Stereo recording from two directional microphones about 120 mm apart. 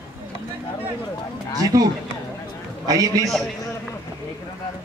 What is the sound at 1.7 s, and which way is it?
A man's voice, 25° right (ahead or behind).